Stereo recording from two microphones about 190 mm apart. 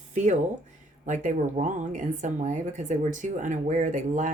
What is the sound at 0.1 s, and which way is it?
Speech, 40° right (ahead or behind).